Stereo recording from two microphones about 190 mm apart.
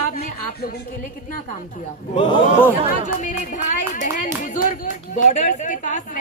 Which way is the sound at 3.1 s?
40° left (ahead or behind).